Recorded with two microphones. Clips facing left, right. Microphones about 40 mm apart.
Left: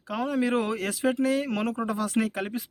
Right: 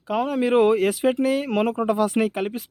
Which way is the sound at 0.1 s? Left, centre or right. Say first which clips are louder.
Right 5 dB; right.